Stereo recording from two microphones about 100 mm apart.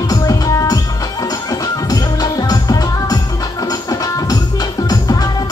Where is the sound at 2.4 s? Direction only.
40° left (ahead or behind).